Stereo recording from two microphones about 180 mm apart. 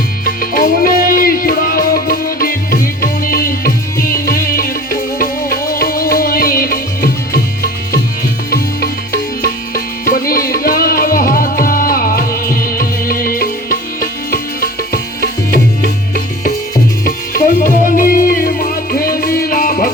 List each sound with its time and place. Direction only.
0.3 s music: 55° left (ahead or behind)
8.4 s music: 55° left (ahead or behind)